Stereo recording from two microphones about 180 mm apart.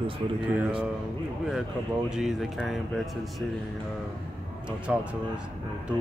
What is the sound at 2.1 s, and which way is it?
Speech, centre (ahead or behind).